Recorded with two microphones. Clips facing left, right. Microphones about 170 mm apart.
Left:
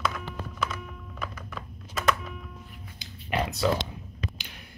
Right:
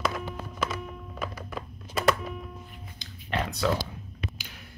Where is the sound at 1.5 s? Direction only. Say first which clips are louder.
Right 4 dB; 30° right (ahead or behind).